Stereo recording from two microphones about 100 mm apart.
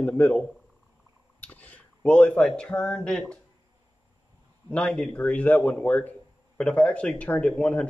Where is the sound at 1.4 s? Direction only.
15° left (ahead or behind).